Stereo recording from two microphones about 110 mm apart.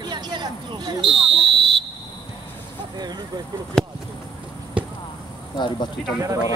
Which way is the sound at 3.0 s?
40° right (ahead or behind).